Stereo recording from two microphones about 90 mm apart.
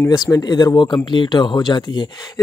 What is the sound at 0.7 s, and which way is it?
Speech, 55° left (ahead or behind).